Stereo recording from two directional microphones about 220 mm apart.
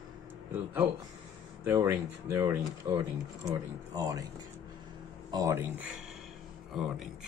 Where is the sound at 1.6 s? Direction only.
10° right (ahead or behind).